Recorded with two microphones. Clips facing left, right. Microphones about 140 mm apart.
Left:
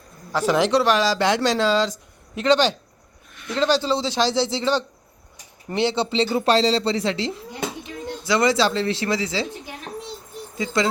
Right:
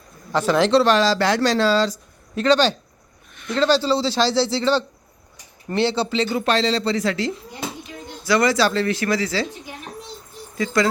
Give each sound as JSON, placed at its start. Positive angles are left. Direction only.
{"t": 0.3, "sound": "speech", "side_deg": 15}
{"t": 10.6, "sound": "speech", "side_deg": 25}